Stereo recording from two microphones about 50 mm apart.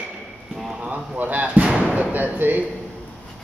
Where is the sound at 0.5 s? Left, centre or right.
Centre.